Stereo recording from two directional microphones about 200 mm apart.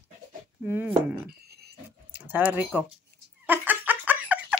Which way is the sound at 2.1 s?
10° right (ahead or behind).